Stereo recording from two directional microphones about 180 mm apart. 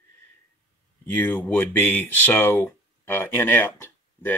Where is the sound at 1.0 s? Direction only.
10° left (ahead or behind).